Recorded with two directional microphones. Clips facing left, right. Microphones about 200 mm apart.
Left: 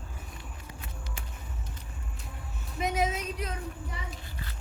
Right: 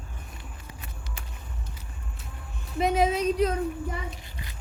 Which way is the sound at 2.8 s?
30° right (ahead or behind).